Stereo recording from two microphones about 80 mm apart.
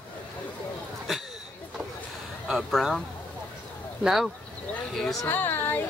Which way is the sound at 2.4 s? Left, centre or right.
Centre.